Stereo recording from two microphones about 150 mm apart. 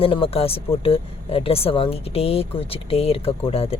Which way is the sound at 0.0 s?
40° left (ahead or behind).